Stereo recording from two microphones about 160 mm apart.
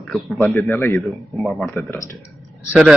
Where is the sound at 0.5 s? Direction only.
15° left (ahead or behind).